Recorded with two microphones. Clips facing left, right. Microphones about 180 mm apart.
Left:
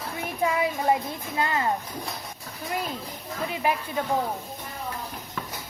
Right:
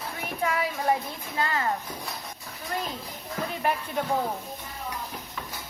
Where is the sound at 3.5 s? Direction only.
5° left (ahead or behind).